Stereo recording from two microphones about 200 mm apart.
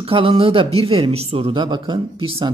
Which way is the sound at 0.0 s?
30° right (ahead or behind).